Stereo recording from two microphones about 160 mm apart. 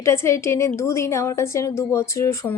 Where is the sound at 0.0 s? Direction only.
15° left (ahead or behind).